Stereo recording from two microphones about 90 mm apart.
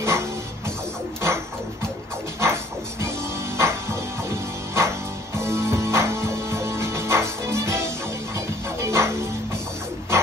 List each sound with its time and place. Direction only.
0.0 s music: 30° right (ahead or behind)
2.4 s music: 30° right (ahead or behind)